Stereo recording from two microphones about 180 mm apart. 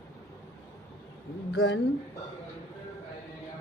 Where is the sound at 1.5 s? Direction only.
90° left.